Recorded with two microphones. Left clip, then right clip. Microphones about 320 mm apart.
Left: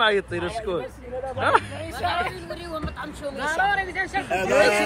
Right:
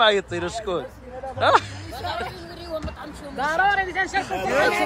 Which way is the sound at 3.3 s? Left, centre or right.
Right.